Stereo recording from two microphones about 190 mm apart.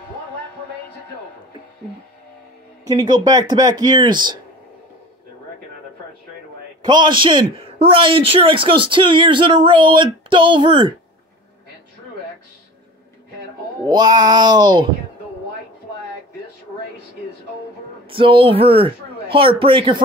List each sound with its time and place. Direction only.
2.8 s speech: 20° right (ahead or behind)
6.8 s speech: 25° right (ahead or behind)
13.8 s speech: 20° right (ahead or behind)
18.1 s speech: 30° right (ahead or behind)